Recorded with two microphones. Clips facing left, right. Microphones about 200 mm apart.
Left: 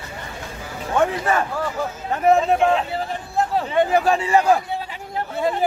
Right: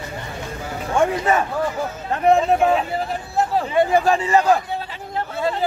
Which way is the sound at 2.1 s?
Centre (ahead or behind).